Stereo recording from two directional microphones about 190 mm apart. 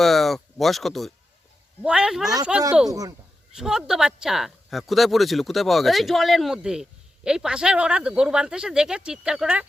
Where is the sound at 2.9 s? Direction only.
20° right (ahead or behind).